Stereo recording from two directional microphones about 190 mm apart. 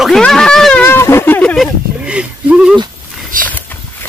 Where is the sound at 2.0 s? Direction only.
5° right (ahead or behind).